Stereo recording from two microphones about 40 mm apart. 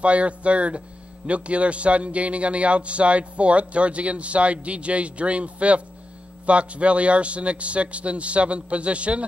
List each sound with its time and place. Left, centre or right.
0.0 s speech: right